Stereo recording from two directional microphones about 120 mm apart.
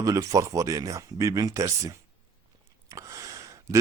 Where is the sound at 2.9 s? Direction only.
25° right (ahead or behind).